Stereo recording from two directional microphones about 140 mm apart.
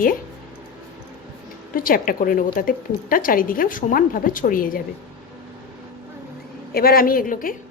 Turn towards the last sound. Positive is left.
turn(degrees=80)